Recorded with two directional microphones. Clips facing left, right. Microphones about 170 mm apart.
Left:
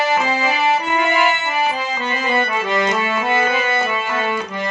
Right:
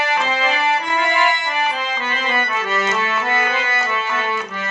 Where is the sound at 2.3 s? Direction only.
20° left (ahead or behind).